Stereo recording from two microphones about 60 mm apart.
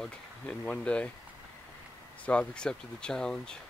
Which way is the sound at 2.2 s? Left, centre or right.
Left.